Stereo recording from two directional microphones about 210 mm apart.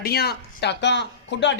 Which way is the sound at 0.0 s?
50° left (ahead or behind).